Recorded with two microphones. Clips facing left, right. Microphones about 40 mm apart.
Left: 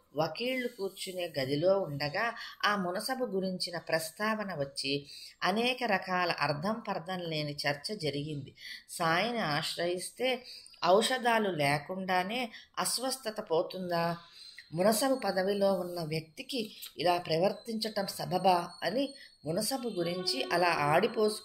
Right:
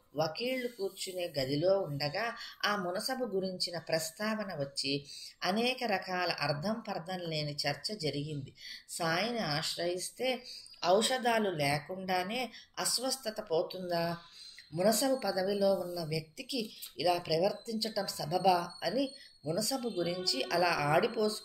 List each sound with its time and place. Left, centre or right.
0.2 s speech: centre
0.7 s speech: left
1.0 s speech: centre